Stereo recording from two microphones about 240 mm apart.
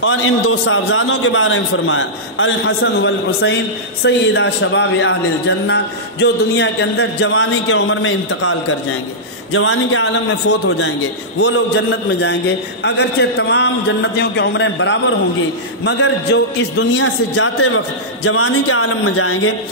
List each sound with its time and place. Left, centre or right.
0.0 s a man's voice: left
11.3 s a man's voice: left
12.2 s a man's voice: left
16.9 s a man's voice: left